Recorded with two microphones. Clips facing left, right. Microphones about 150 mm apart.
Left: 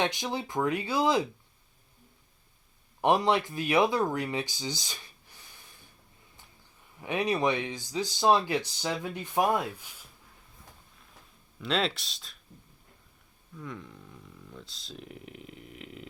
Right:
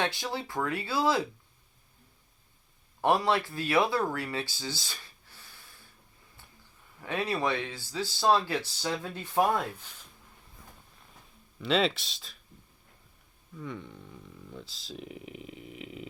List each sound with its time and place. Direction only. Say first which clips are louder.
0.0 s speech: left 2 dB; 20° left (ahead or behind)
3.0 s speech: left 1 dB; 20° left (ahead or behind)
7.0 s speech: left 3 dB; 15° left (ahead or behind)
11.6 s speech: right 3 dB; centre (ahead or behind)
13.6 s speech: right 2 dB; centre (ahead or behind)